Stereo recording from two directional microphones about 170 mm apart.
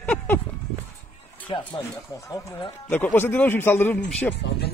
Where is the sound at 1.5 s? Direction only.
35° left (ahead or behind).